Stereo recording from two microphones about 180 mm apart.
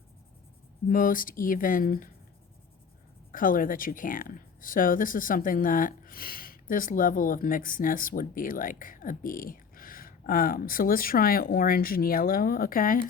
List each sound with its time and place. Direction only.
0.9 s speech: 50° left (ahead or behind)
3.3 s speech: 50° left (ahead or behind)